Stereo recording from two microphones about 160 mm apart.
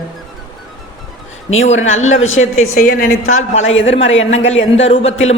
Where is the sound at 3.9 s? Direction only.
40° left (ahead or behind).